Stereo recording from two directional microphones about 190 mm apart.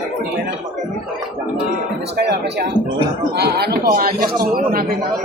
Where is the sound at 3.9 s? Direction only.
50° right (ahead or behind).